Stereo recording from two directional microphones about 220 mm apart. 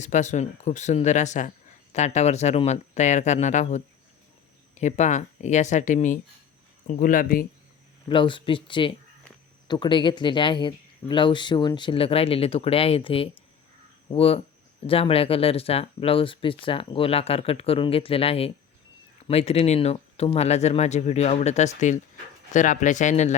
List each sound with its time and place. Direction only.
0.0 s speech: 35° left (ahead or behind)
8.1 s speech: 20° left (ahead or behind)